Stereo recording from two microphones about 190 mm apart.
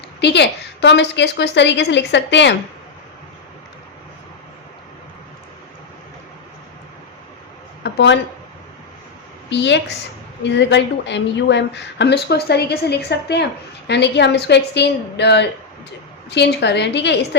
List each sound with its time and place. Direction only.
0.2 s speech: 65° left (ahead or behind)
7.9 s speech: 65° left (ahead or behind)
9.5 s a woman's voice: 70° left (ahead or behind)